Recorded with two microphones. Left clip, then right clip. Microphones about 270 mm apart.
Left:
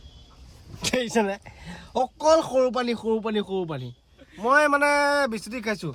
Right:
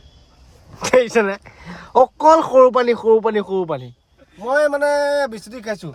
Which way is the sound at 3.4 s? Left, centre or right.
Right.